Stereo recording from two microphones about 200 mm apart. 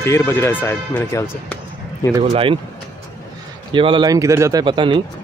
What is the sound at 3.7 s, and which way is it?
Speech, 25° right (ahead or behind).